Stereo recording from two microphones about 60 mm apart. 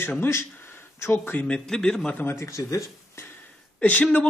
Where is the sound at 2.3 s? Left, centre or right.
Left.